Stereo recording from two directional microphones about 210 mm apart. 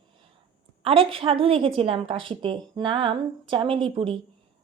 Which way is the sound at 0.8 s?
25° right (ahead or behind).